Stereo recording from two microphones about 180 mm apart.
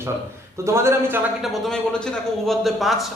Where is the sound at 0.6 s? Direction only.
15° right (ahead or behind).